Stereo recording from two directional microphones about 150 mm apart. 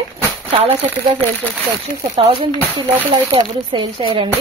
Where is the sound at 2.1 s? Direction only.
35° right (ahead or behind).